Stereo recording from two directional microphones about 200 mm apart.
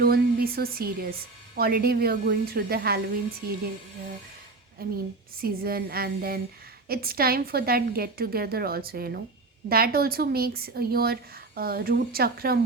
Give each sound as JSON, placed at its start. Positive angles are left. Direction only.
{"t": 0.0, "sound": "a woman's voice", "side_deg": -50}
{"t": 4.8, "sound": "a woman's voice", "side_deg": -50}